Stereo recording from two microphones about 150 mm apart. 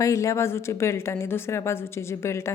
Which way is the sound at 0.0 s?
20° left (ahead or behind).